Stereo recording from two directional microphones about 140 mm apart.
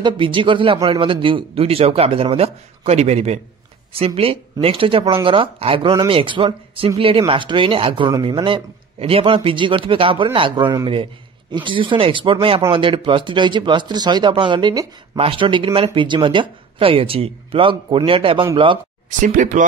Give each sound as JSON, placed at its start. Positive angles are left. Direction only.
{"t": 0.0, "sound": "speech", "side_deg": -35}
{"t": 19.0, "sound": "speech", "side_deg": -65}